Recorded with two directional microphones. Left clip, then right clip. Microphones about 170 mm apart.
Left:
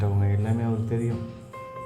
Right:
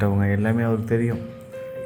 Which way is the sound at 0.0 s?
20° right (ahead or behind).